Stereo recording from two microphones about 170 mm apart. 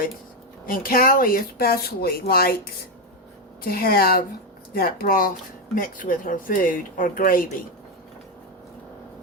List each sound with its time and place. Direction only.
0.6 s speech: 55° left (ahead or behind)
3.6 s speech: 60° left (ahead or behind)